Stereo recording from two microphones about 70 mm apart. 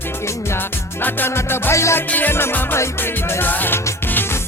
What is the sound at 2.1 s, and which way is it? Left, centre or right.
Music, left.